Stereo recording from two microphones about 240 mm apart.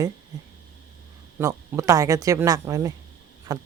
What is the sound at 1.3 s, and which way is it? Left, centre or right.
Speech, centre.